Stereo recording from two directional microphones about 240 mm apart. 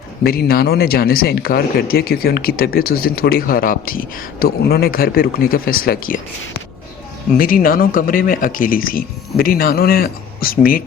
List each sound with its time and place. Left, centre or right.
0.2 s a man's voice: left
7.3 s a man's voice: left